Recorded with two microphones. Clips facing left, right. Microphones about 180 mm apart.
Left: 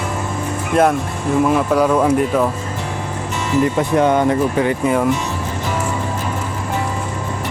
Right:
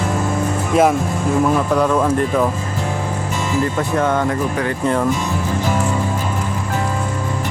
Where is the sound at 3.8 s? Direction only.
20° left (ahead or behind).